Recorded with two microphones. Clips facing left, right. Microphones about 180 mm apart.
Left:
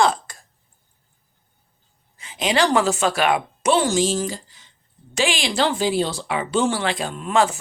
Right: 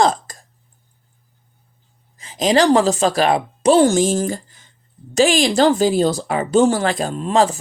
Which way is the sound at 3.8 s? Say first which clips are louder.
Right 5 dB; 50° right (ahead or behind).